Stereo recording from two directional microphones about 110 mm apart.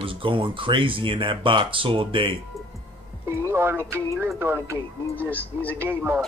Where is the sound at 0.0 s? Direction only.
55° right (ahead or behind).